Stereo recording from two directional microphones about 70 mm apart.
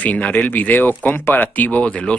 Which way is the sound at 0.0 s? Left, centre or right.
Left.